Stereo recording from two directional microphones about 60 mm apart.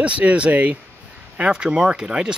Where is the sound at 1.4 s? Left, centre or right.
Centre.